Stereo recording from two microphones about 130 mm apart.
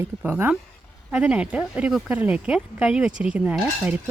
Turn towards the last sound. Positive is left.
turn(degrees=-15)  # may be behind; listen again after turning